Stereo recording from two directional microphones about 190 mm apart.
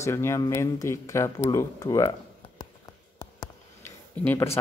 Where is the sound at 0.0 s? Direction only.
15° left (ahead or behind).